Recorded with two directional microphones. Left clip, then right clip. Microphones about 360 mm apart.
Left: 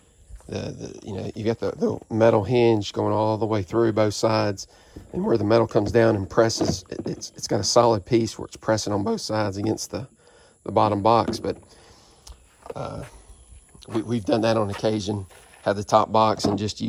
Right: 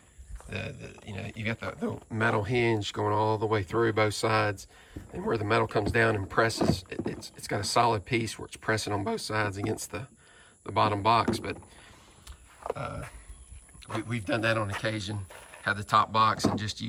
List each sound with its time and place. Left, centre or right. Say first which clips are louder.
0.7 s speech: left 8 dB; left
1.0 s speech: left 8 dB; centre
12.2 s a sound: right 5 dB; centre
14.1 s speech: left 7 dB; centre
15.3 s a sound: right 2 dB; centre
15.6 s speech: left 5 dB; centre